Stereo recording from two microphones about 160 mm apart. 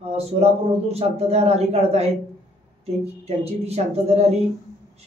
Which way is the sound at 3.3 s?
40° right (ahead or behind).